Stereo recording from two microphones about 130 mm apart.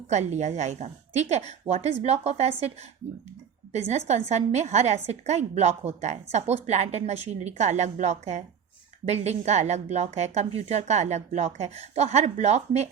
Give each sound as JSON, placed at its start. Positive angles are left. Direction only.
{"t": 0.1, "sound": "a woman's voice", "side_deg": -60}